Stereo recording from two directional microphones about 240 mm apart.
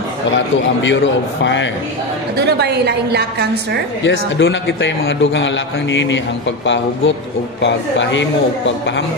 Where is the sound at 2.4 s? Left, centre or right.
Right.